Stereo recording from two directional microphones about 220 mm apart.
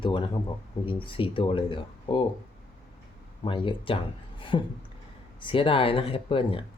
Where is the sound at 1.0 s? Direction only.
25° left (ahead or behind).